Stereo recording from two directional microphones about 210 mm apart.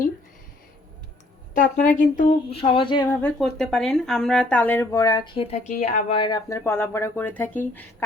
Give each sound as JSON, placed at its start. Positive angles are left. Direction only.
{"t": 1.7, "sound": "speech", "side_deg": 40}
{"t": 3.3, "sound": "speech", "side_deg": 0}